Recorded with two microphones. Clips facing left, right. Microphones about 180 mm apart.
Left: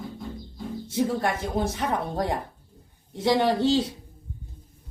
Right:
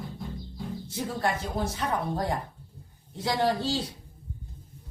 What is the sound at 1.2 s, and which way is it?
A woman's voice, 20° left (ahead or behind).